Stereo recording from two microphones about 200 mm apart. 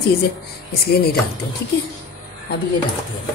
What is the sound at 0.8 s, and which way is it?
Speech, 50° left (ahead or behind).